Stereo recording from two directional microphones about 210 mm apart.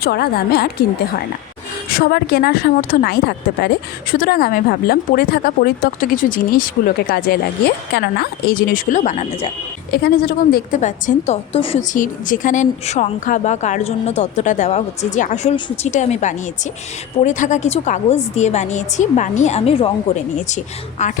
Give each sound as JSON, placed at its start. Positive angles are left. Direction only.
{"t": 0.0, "sound": "a woman's voice", "side_deg": 50}
{"t": 1.9, "sound": "a woman's voice", "side_deg": 45}
{"t": 9.9, "sound": "speech", "side_deg": 50}
{"t": 11.9, "sound": "speech", "side_deg": 40}